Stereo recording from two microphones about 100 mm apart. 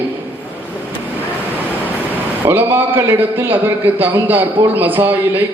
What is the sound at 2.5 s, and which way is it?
A man's voice, 25° right (ahead or behind).